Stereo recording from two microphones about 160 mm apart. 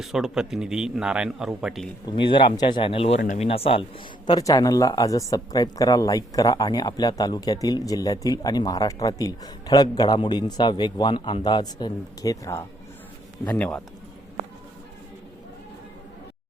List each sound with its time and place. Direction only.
0.0 s speech: centre (ahead or behind)
2.0 s speech: 30° left (ahead or behind)
4.3 s a man's voice: 25° left (ahead or behind)